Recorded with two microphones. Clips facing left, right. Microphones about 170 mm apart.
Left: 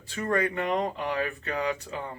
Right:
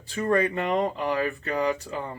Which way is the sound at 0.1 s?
30° right (ahead or behind).